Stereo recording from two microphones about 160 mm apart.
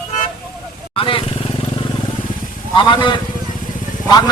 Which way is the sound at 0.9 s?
35° left (ahead or behind).